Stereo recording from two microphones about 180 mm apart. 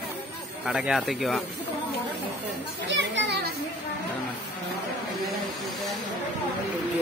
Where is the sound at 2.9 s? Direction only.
75° right (ahead or behind).